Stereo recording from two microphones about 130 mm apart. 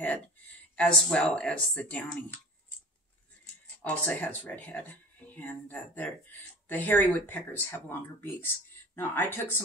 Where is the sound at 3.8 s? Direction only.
10° left (ahead or behind).